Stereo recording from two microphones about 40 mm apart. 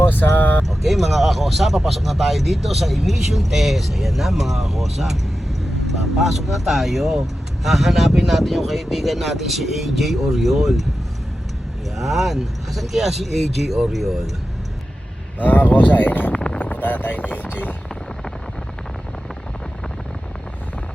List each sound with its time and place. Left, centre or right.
0.0 s vehicle: left
0.7 s speech: centre
11.9 s speech: centre
15.4 s speech: left